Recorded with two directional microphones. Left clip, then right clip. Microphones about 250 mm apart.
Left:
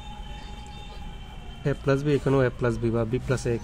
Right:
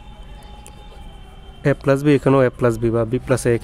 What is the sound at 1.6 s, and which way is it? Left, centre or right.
Speech, right.